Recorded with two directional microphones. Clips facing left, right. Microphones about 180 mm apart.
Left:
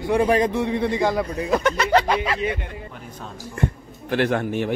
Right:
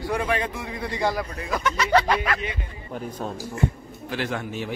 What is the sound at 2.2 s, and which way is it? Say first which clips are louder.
Speech: left 4 dB; 30° left (ahead or behind).